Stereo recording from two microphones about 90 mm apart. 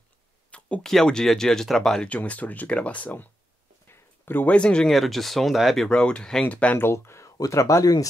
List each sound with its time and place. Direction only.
0.5 s a sound: 15° left (ahead or behind)
0.9 s speech: 5° left (ahead or behind)
3.9 s a sound: 25° left (ahead or behind)
4.5 s speech: 10° left (ahead or behind)
4.9 s speech: centre (ahead or behind)
5.9 s speech: 10° left (ahead or behind)
6.9 s speech: 30° left (ahead or behind)